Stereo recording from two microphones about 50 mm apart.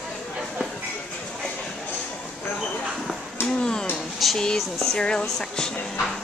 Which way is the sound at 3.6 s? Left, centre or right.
Centre.